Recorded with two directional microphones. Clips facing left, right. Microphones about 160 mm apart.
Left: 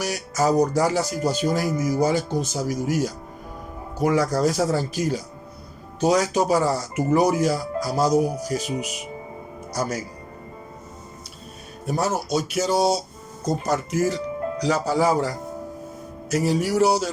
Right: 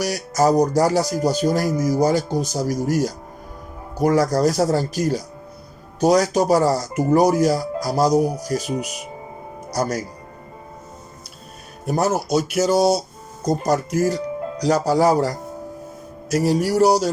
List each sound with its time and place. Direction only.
0.0 s speech: 40° right (ahead or behind)
11.9 s speech: 40° right (ahead or behind)